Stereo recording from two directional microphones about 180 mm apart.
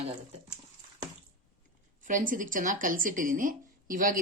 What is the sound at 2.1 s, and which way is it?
A woman's voice, 45° right (ahead or behind).